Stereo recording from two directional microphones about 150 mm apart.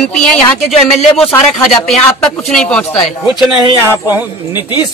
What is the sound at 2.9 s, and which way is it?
Speech, 30° left (ahead or behind).